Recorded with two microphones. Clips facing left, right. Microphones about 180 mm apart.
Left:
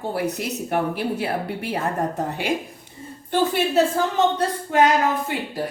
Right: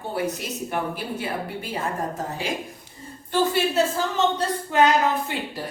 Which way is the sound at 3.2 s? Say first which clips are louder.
Left 1 dB; 60° left (ahead or behind).